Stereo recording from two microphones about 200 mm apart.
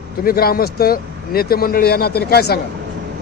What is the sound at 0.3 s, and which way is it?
A man's voice, 50° left (ahead or behind).